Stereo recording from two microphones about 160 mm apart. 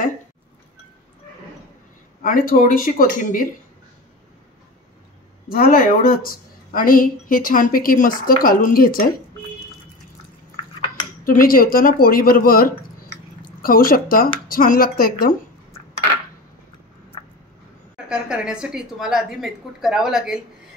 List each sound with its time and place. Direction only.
2.2 s a woman's voice: 60° left (ahead or behind)
5.5 s a woman's voice: 65° left (ahead or behind)
11.2 s a woman's voice: 65° left (ahead or behind)
17.9 s a woman's voice: 5° right (ahead or behind)